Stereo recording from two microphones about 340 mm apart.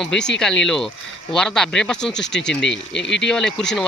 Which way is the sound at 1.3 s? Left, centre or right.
Centre.